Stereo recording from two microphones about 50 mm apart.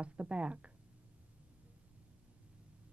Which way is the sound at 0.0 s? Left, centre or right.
Right.